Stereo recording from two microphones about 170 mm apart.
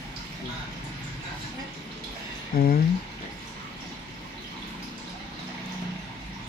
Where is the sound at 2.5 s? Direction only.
60° left (ahead or behind).